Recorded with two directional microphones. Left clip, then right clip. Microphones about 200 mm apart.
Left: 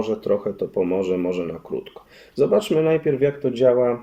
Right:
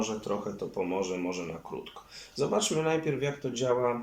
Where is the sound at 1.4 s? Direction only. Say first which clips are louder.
Left 10 dB; 40° left (ahead or behind).